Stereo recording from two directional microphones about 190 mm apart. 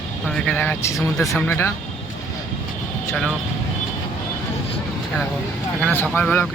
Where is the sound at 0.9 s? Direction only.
Centre (ahead or behind).